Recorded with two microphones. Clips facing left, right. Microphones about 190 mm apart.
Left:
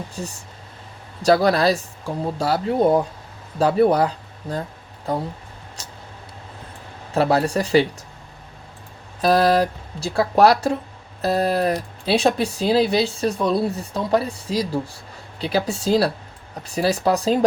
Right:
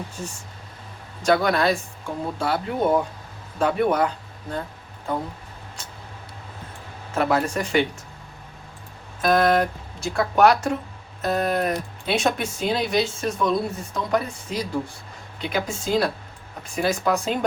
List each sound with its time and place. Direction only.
1.2 s speech: 35° left (ahead or behind)
7.1 s speech: 35° left (ahead or behind)
9.2 s speech: 35° left (ahead or behind)